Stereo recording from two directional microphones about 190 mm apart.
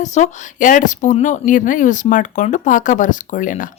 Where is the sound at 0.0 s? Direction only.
40° left (ahead or behind).